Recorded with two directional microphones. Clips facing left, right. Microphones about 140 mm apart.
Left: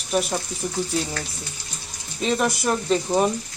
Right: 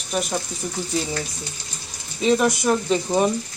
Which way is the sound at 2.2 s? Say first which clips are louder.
Right 4 dB; centre (ahead or behind).